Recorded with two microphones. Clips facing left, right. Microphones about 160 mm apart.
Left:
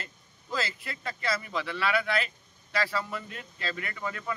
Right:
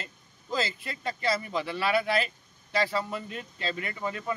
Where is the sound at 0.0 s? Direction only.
25° right (ahead or behind).